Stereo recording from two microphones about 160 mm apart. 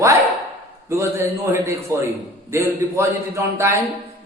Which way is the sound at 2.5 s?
15° right (ahead or behind).